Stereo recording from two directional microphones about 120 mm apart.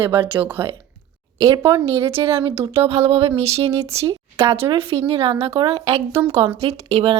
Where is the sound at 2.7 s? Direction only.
60° right (ahead or behind).